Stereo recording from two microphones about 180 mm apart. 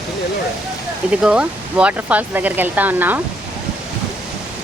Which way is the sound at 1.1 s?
5° right (ahead or behind).